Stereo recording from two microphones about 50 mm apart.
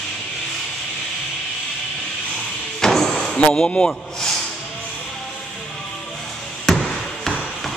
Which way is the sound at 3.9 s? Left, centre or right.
Centre.